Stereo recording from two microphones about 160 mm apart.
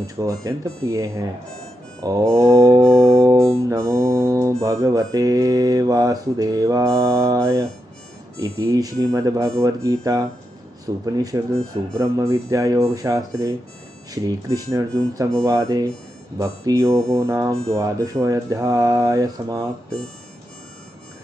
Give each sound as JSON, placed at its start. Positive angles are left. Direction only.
{"t": 0.0, "sound": "mantra", "side_deg": -20}
{"t": 3.0, "sound": "music", "side_deg": -20}
{"t": 3.5, "sound": "mantra", "side_deg": -20}